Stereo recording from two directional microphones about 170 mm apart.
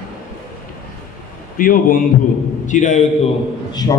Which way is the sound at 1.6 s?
55° left (ahead or behind).